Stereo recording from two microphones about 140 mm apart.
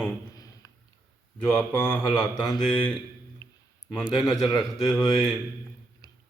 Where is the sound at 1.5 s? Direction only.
10° left (ahead or behind).